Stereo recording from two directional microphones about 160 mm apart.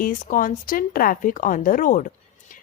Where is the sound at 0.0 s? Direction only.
60° left (ahead or behind).